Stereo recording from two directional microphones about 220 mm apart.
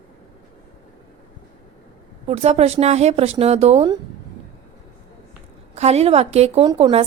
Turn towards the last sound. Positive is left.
turn(degrees=-20)  # may be behind; listen again after turning